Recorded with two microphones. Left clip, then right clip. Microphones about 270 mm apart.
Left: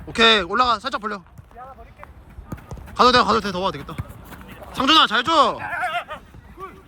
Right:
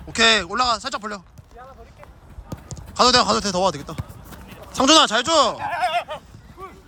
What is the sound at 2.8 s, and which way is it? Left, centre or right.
Speech, centre.